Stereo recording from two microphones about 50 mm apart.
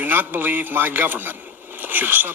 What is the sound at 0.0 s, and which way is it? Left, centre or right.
Speech, right.